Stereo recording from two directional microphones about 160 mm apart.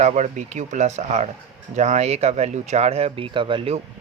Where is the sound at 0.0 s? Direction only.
45° right (ahead or behind).